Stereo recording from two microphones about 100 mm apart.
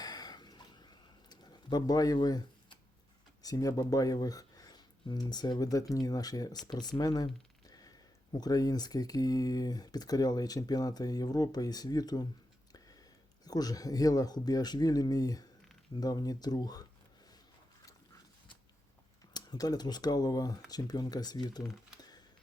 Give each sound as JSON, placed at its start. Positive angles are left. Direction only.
{"t": 0.0, "sound": "a sound", "side_deg": 40}
{"t": 3.4, "sound": "speech", "side_deg": 35}
{"t": 19.3, "sound": "speech", "side_deg": 40}